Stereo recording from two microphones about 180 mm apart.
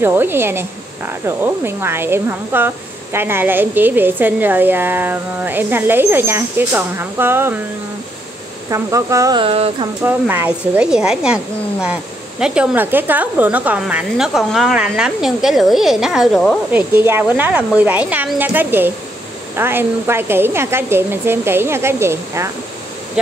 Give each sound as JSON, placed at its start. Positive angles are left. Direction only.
{"t": 0.0, "sound": "speech", "side_deg": -10}
{"t": 8.6, "sound": "speech", "side_deg": -15}
{"t": 10.0, "sound": "speech", "side_deg": -10}
{"t": 16.7, "sound": "speech", "side_deg": -10}
{"t": 23.2, "sound": "a sound", "side_deg": -5}